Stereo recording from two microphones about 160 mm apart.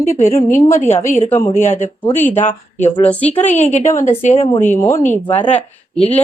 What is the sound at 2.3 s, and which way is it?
Speech, 45° left (ahead or behind).